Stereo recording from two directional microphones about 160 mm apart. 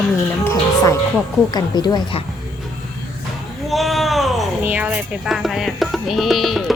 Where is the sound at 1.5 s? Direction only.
25° left (ahead or behind).